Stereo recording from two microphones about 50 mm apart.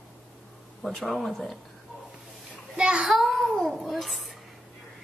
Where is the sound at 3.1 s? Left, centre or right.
Centre.